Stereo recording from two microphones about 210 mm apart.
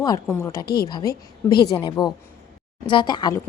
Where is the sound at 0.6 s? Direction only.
50° left (ahead or behind).